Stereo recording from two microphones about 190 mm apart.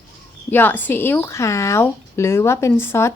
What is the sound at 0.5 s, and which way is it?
Speech, 10° left (ahead or behind).